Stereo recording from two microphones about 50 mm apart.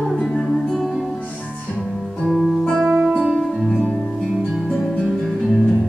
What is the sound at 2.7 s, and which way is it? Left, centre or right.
Music, centre.